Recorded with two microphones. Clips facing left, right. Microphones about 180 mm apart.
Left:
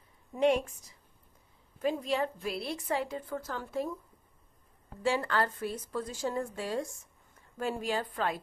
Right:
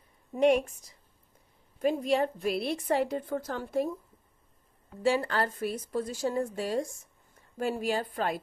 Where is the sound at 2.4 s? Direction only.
60° right (ahead or behind).